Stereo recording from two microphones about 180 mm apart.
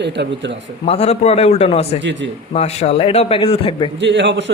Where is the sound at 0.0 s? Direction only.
75° right (ahead or behind).